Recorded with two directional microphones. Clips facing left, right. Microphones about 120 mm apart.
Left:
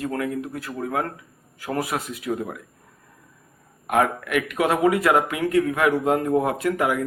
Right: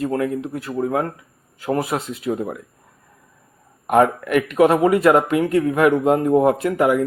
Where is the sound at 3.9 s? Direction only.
30° right (ahead or behind).